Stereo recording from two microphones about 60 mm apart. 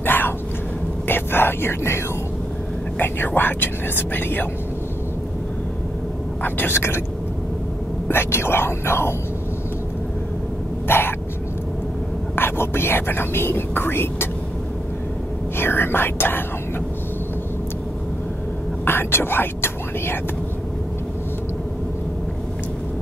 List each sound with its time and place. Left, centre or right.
0.0 s a sound: left
1.0 s whispering: left
3.0 s speech: left
6.4 s speech: left
8.1 s speech: left
10.9 s throat clearing: left
12.4 s speech: left
15.5 s speech: left
18.9 s whispering: left